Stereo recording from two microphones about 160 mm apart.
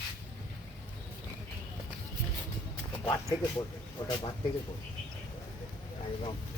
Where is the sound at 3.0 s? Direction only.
20° left (ahead or behind).